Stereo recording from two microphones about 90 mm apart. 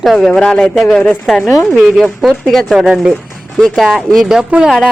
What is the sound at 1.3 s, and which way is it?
Speech, 5° right (ahead or behind).